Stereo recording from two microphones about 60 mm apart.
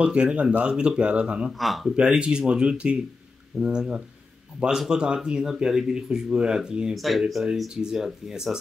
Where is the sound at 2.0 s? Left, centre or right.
Centre.